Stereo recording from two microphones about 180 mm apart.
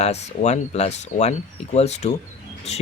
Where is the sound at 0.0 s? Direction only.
40° left (ahead or behind).